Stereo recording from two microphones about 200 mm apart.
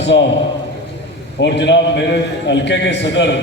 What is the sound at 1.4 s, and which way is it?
A man's voice, 60° left (ahead or behind).